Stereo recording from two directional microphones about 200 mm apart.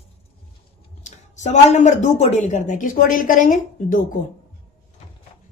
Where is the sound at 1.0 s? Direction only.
35° left (ahead or behind).